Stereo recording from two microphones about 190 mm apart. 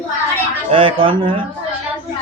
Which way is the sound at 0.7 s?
30° right (ahead or behind).